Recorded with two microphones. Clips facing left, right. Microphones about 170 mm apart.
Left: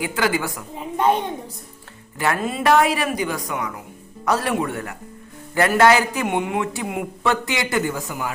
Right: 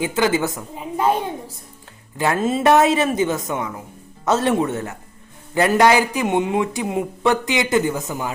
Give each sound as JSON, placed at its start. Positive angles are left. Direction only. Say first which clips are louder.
{"t": 0.0, "sound": "speech", "louder": "right 3 dB", "side_deg": -20}
{"t": 0.8, "sound": "a sound", "louder": "even", "side_deg": 0}
{"t": 2.1, "sound": "speech", "louder": "right 3 dB", "side_deg": -20}